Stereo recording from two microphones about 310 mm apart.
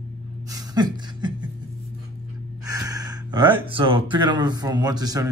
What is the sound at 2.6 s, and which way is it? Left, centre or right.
Speech, centre.